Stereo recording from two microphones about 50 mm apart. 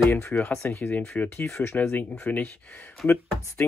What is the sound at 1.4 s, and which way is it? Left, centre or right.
Speech, left.